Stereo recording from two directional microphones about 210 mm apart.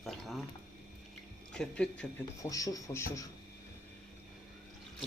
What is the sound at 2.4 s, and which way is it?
Speech, 15° left (ahead or behind).